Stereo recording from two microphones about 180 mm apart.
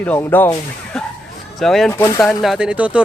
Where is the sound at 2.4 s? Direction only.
5° right (ahead or behind).